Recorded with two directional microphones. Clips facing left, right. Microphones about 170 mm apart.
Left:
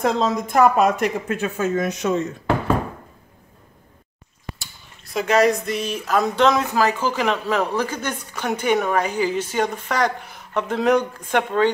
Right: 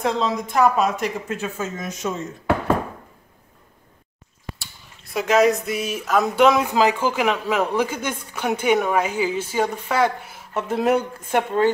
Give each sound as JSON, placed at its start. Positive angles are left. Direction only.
{"t": 0.0, "sound": "speech", "side_deg": 45}
{"t": 5.1, "sound": "speech", "side_deg": 0}